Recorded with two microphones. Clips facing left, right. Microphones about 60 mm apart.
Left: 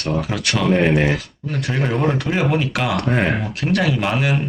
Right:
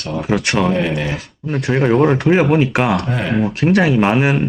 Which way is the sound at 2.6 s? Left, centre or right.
Right.